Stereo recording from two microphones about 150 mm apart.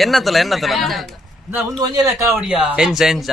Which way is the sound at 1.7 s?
25° right (ahead or behind).